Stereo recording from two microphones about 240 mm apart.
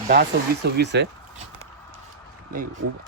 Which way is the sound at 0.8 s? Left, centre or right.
Right.